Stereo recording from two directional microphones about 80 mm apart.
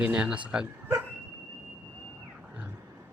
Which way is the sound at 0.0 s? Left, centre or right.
Centre.